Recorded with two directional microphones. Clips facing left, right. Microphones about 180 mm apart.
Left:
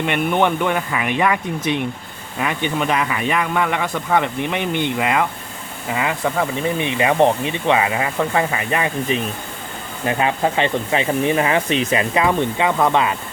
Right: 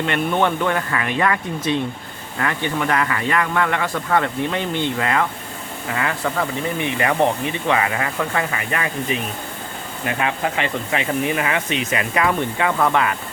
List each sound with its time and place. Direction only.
0.0 s speech: 15° left (ahead or behind)
10.1 s speech: 25° left (ahead or behind)